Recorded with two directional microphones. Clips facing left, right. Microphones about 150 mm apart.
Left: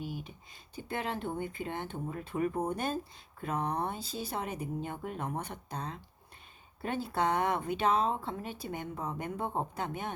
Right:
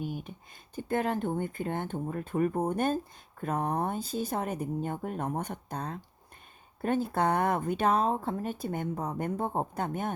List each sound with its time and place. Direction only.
0.0 s speech: 50° right (ahead or behind)